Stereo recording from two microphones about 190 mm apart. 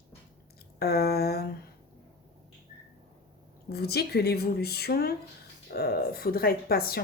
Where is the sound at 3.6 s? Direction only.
55° left (ahead or behind).